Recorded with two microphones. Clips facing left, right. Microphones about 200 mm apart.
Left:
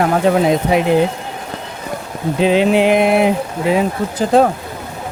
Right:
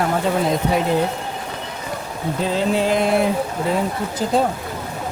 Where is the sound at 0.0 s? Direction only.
80° left.